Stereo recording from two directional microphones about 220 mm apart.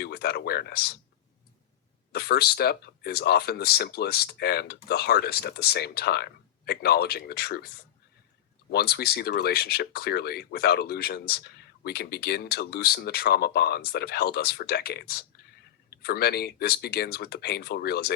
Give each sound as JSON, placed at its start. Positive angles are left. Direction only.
{"t": 0.0, "sound": "speech", "side_deg": 45}
{"t": 2.1, "sound": "speech", "side_deg": 45}
{"t": 8.7, "sound": "speech", "side_deg": 45}